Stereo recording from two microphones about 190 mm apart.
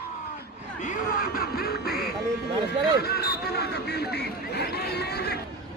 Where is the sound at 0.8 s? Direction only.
45° left (ahead or behind).